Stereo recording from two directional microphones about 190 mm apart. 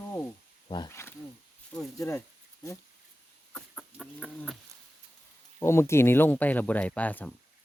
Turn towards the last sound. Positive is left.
turn(degrees=10)  # may be behind; listen again after turning